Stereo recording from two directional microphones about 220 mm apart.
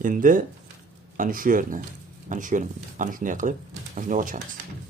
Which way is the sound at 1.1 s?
40° right (ahead or behind).